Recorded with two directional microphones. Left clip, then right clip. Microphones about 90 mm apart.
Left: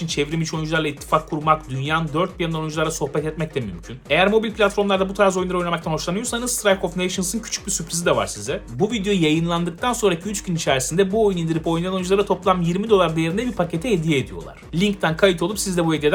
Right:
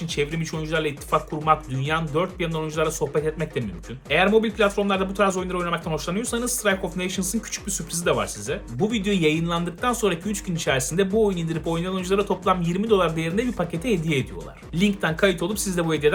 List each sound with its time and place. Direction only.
0.1 s speech: 30° left (ahead or behind)
1.5 s speech: 25° left (ahead or behind)